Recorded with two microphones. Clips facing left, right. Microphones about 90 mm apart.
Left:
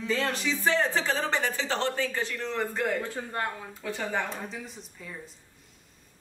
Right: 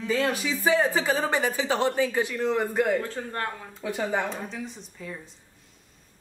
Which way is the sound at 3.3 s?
10° left (ahead or behind).